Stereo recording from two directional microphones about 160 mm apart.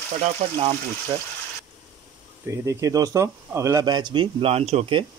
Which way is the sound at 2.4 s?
20° right (ahead or behind).